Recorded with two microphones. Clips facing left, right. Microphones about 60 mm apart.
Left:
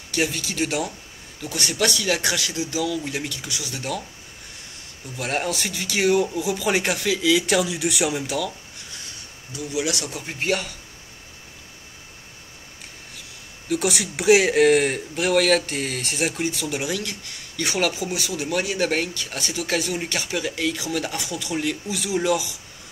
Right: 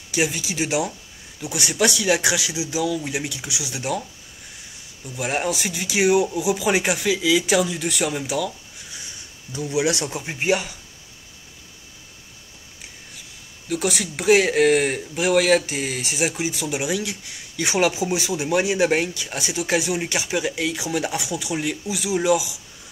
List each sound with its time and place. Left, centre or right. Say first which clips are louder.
0.1 s speech: right 1 dB; centre
5.1 s speech: right 2 dB; centre
9.6 s speech: right 4 dB; right
13.7 s speech: left 1 dB; centre